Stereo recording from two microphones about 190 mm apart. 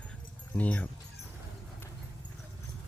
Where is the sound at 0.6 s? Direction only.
10° left (ahead or behind).